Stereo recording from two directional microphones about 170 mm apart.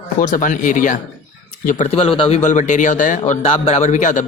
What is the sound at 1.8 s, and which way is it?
Speech, 35° left (ahead or behind).